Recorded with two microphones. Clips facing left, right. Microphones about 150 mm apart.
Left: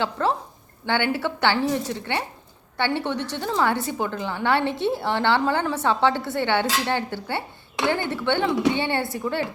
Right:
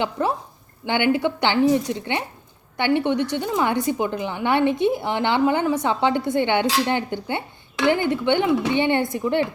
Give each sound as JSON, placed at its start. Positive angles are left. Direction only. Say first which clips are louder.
{"t": 0.0, "sound": "a woman's voice", "louder": "right 1 dB", "side_deg": -15}